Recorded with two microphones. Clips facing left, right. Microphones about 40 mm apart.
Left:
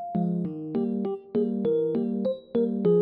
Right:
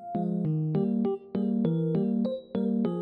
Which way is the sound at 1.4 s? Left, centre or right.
Centre.